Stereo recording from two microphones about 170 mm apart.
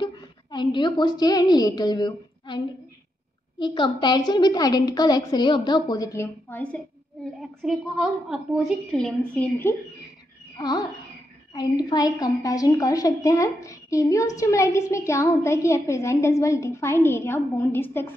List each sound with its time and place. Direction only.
0.0 s a woman's voice: 25° left (ahead or behind); by 9.8 s 10° left (ahead or behind)
10.6 s a woman's voice: 25° left (ahead or behind)